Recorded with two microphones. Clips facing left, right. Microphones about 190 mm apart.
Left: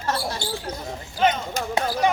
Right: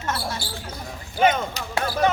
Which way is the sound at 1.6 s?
50° left (ahead or behind).